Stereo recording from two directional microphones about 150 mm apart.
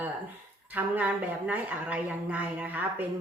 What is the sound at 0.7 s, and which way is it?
A woman's voice, 10° right (ahead or behind).